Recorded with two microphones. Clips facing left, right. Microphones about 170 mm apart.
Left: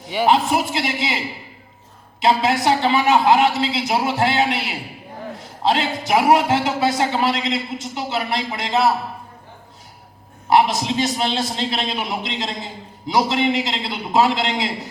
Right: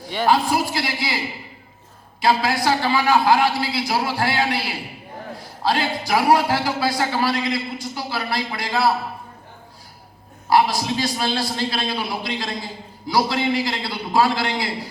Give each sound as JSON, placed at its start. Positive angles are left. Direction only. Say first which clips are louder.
{"t": 0.3, "sound": "a man's voice", "louder": "left 1 dB", "side_deg": 20}
{"t": 2.2, "sound": "a man's voice", "louder": "left 2 dB", "side_deg": 20}
{"t": 10.5, "sound": "a man's voice", "louder": "left 1 dB", "side_deg": 20}